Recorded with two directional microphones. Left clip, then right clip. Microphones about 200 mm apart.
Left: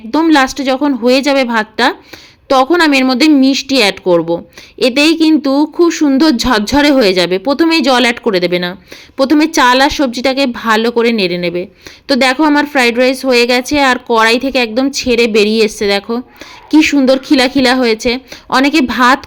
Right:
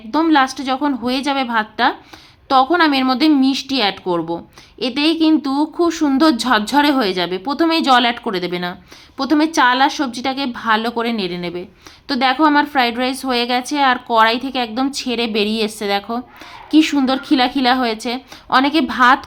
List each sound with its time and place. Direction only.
0.1 s speech: 20° left (ahead or behind)